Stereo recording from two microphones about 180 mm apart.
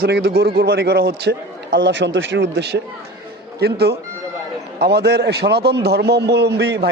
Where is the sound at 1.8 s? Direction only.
80° right.